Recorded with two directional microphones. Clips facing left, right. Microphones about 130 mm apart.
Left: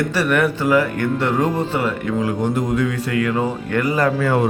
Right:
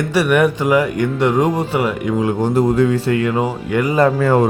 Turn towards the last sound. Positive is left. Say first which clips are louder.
# right 4 dB
turn(degrees=-45)  # may be behind; listen again after turning